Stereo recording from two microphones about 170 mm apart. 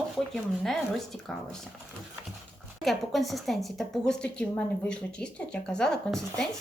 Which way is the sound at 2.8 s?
Centre (ahead or behind).